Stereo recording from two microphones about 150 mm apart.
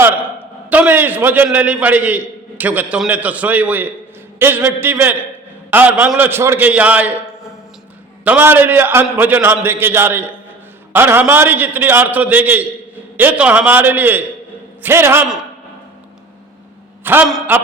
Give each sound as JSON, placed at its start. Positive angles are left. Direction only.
{"t": 0.0, "sound": "a sound", "side_deg": -15}
{"t": 0.7, "sound": "a man's voice", "side_deg": -10}
{"t": 8.2, "sound": "a man's voice", "side_deg": -10}
{"t": 17.0, "sound": "a man's voice", "side_deg": -15}